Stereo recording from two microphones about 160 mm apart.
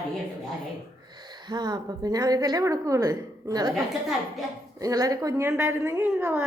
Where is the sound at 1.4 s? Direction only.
25° right (ahead or behind).